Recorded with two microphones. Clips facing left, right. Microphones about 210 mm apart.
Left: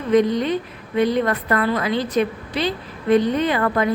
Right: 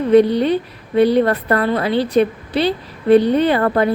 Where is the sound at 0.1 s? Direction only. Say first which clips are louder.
Right 4 dB; 35° right (ahead or behind).